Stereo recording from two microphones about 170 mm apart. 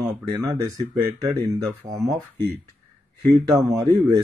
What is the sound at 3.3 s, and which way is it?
Speech, 20° right (ahead or behind).